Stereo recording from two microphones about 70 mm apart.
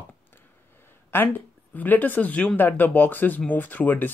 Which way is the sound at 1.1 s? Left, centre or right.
Left.